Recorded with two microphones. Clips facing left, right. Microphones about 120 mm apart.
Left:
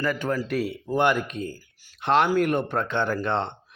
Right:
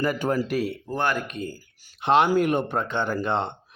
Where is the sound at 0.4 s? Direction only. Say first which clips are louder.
Right 1 dB; centre (ahead or behind).